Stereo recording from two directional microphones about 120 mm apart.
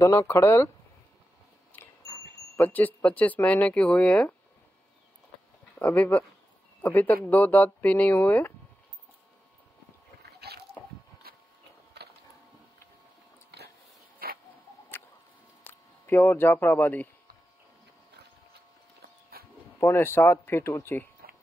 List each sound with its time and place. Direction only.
0.0 s speech: 25° left (ahead or behind)
2.6 s speech: 15° left (ahead or behind)
5.8 s speech: 15° left (ahead or behind)
15.6 s speech: 15° left (ahead or behind)
19.8 s speech: 20° left (ahead or behind)